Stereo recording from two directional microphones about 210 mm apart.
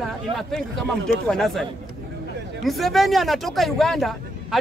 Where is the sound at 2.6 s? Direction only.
Centre (ahead or behind).